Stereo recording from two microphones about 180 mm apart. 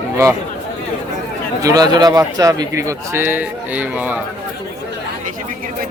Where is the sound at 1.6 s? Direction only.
20° right (ahead or behind).